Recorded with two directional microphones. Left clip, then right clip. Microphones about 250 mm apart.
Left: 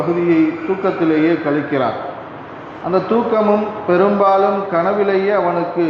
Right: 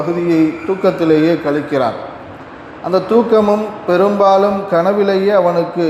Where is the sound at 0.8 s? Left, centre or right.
Right.